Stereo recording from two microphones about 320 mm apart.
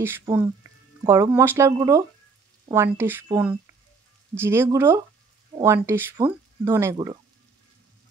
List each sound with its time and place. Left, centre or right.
0.0 s speech: centre